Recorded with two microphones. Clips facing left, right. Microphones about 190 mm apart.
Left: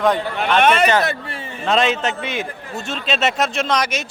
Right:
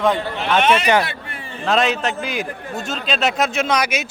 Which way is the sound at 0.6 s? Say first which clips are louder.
Left 2 dB; 55° left (ahead or behind).